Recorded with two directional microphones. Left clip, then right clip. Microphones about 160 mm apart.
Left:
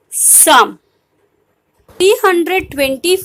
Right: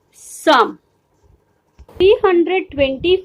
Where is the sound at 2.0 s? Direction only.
25° left (ahead or behind).